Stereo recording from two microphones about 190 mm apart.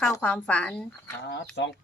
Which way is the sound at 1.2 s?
65° left (ahead or behind).